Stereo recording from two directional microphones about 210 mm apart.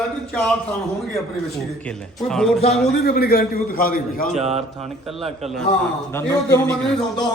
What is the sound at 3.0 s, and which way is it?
A man's voice, 45° left (ahead or behind).